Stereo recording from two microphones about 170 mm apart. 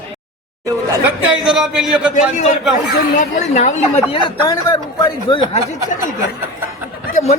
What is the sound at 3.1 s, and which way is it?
Speech, 45° left (ahead or behind).